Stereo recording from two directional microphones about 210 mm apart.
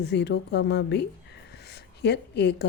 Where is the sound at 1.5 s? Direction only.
50° left (ahead or behind).